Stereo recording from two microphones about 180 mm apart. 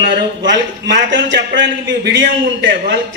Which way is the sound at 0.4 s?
80° right.